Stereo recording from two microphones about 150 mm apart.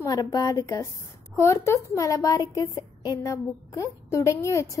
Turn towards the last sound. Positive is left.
turn(degrees=20)  # may be behind; listen again after turning